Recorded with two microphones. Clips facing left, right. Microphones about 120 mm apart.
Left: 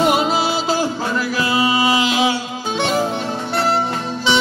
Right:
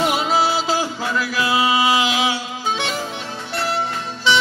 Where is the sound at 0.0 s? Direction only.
45° left (ahead or behind).